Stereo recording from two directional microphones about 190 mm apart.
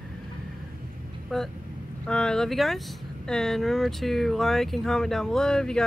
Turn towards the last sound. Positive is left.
turn(degrees=5)  # may be behind; listen again after turning